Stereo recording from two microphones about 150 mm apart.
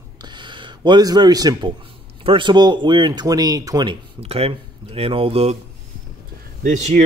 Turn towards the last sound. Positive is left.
turn(degrees=-55)  # may be behind; listen again after turning